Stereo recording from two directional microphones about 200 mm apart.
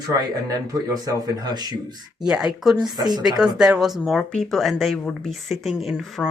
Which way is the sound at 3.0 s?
20° right (ahead or behind).